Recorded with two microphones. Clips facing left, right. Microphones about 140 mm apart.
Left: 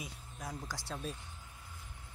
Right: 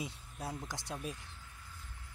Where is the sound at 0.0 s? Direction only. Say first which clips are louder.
Right 3 dB; 30° right (ahead or behind).